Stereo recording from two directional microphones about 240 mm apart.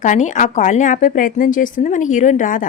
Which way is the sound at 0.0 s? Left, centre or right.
Left.